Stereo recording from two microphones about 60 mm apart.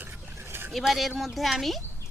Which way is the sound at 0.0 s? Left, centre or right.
Right.